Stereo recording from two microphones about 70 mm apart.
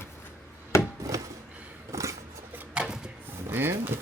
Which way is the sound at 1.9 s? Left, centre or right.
Right.